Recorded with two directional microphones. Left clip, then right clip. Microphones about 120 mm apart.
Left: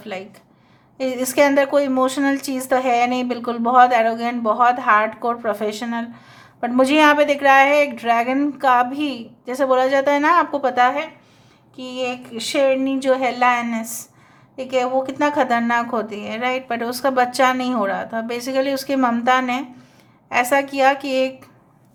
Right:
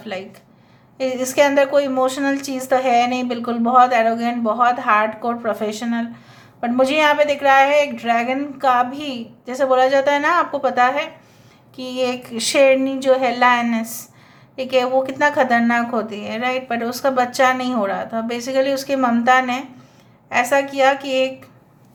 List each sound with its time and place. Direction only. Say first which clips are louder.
0.0 s a woman's voice: right 2 dB; 25° left (ahead or behind)
11.8 s speech: right 3 dB; 10° left (ahead or behind)
12.3 s speech: right 5 dB; 5° right (ahead or behind)
12.6 s a woman's voice: right 2 dB; 10° left (ahead or behind); by 21.3 s 35° left (ahead or behind)